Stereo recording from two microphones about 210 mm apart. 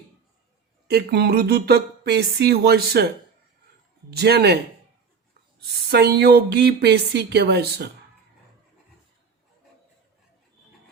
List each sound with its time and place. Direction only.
0.9 s speech: 50° right (ahead or behind)
4.1 s speech: 50° right (ahead or behind)
5.5 s speech: 50° right (ahead or behind)